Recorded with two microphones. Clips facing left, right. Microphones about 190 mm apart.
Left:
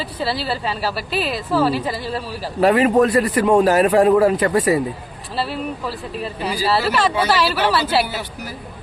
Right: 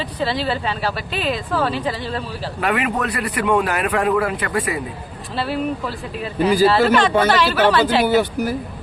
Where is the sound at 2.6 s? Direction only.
30° left (ahead or behind).